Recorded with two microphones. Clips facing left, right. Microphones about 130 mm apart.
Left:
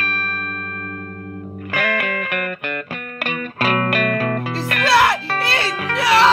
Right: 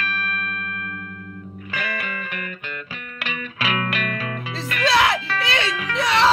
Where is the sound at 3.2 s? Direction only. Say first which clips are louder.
Left 5 dB; 50° left (ahead or behind).